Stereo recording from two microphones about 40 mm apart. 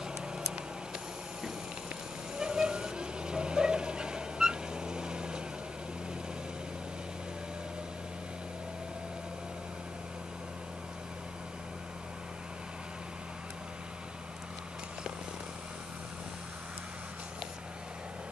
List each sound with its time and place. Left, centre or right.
2.3 s vehicle: centre